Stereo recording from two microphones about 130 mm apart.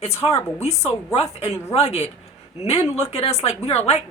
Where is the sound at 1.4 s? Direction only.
50° left (ahead or behind).